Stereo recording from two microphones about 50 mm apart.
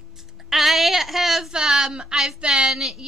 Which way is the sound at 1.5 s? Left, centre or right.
Centre.